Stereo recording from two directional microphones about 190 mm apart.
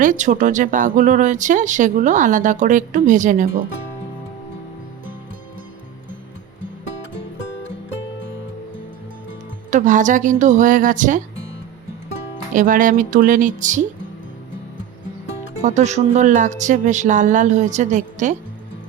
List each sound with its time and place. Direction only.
0.0 s speech: 40° right (ahead or behind)
9.6 s speech: 40° right (ahead or behind)
12.5 s speech: 45° right (ahead or behind)
15.6 s a woman's voice: 40° right (ahead or behind)